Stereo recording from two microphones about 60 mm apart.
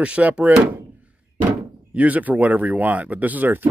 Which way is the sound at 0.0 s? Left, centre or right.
Right.